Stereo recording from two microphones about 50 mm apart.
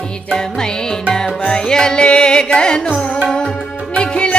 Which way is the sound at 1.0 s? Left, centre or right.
Centre.